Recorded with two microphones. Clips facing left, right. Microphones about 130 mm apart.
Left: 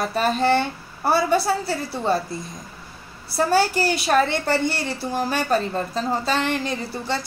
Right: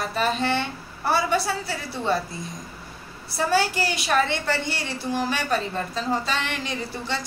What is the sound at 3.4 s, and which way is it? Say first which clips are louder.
A woman's voice: left 3 dB; 45° left (ahead or behind).